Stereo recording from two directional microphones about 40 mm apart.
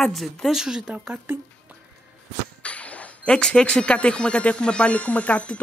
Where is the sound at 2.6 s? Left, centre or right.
Left.